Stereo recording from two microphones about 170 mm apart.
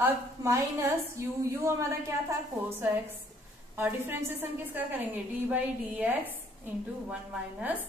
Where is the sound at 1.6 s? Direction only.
15° right (ahead or behind).